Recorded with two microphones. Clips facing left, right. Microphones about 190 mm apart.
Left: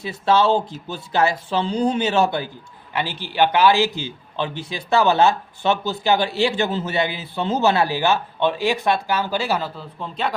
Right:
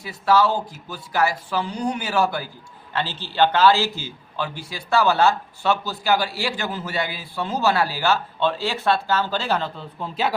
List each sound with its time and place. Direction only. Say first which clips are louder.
0.0 s a man's voice: left 1 dB; 25° left (ahead or behind); by 10.3 s 5° right (ahead or behind)